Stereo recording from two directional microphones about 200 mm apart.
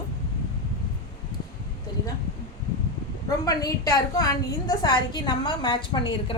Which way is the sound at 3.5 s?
20° left (ahead or behind).